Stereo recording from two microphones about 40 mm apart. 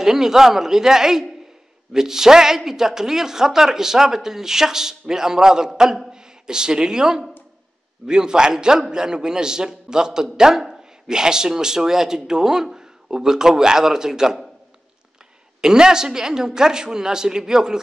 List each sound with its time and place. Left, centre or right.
0.0 s a man's voice: centre
15.6 s speech: centre